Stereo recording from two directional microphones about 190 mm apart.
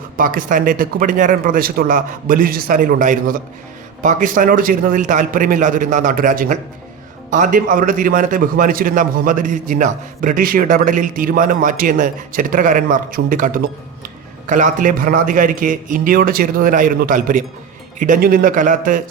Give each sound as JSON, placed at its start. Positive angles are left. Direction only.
{"t": 0.2, "sound": "a man's voice", "side_deg": -45}